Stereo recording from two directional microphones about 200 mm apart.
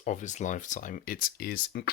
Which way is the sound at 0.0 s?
40° left (ahead or behind).